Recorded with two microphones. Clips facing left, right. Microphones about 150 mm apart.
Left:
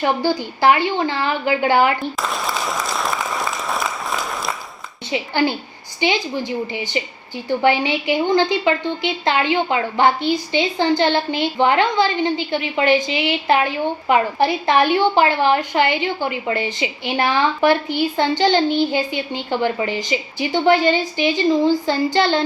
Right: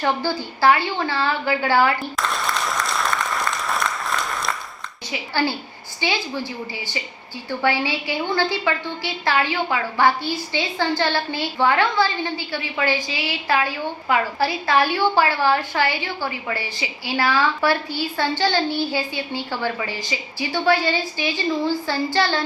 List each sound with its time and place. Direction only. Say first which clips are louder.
0.0 s a woman's voice: left 4 dB; 15° left (ahead or behind)
2.0 s applause: left 2 dB; centre (ahead or behind)
5.1 s a woman's voice: left 4 dB; 20° left (ahead or behind)